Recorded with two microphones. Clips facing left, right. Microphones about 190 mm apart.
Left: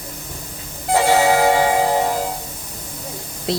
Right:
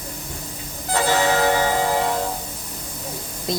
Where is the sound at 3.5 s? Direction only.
75° left (ahead or behind).